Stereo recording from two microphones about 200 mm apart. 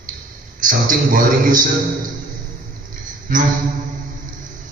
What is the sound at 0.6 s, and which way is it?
A man's voice, 45° right (ahead or behind).